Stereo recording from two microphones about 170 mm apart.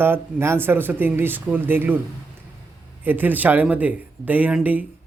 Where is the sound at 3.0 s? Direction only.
10° right (ahead or behind).